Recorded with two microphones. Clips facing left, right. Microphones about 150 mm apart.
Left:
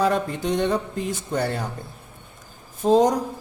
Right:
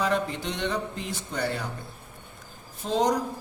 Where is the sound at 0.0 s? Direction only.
45° left (ahead or behind).